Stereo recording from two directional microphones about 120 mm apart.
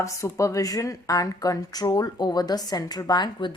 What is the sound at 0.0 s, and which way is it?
Speech, 25° left (ahead or behind).